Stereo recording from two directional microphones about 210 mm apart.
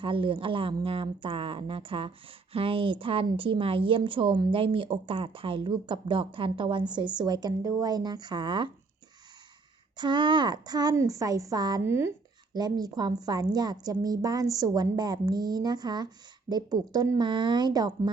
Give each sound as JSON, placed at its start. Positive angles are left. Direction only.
{"t": 0.0, "sound": "speech", "side_deg": -25}
{"t": 10.0, "sound": "speech", "side_deg": -20}